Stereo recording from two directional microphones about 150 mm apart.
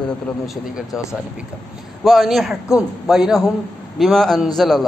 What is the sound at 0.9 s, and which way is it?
Speech, 20° left (ahead or behind).